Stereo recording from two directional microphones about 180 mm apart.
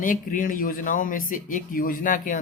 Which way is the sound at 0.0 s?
50° left (ahead or behind).